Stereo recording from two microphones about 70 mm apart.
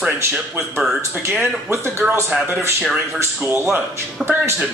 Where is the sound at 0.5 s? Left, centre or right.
Centre.